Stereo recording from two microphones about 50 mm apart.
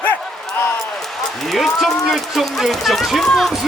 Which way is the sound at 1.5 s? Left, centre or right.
Centre.